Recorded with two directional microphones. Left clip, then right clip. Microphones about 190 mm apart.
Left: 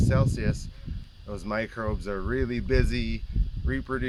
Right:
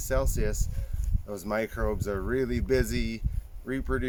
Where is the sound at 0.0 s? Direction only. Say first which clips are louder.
Left 1 dB; 15° left (ahead or behind).